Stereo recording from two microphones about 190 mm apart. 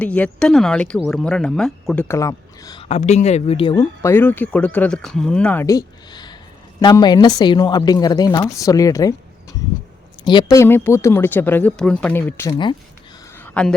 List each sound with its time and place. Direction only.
0.0 s speech: 5° left (ahead or behind)
2.9 s speech: 35° left (ahead or behind)
4.0 s a woman's voice: 10° left (ahead or behind)
13.4 s a sound: 5° left (ahead or behind)